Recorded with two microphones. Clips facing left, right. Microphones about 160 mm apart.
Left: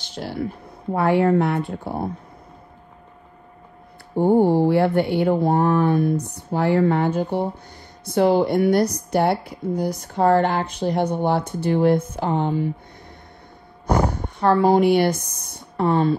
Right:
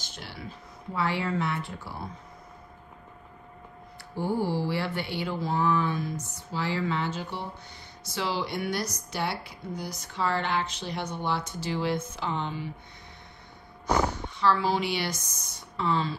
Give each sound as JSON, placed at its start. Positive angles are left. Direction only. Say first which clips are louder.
{"t": 0.1, "sound": "a woman's voice", "louder": "left 15 dB", "side_deg": 55}
{"t": 4.1, "sound": "a woman's voice", "louder": "left 12 dB", "side_deg": 60}
{"t": 14.1, "sound": "speech", "louder": "left 7 dB", "side_deg": 60}